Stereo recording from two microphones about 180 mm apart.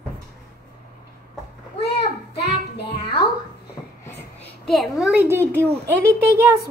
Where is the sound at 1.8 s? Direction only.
65° left (ahead or behind).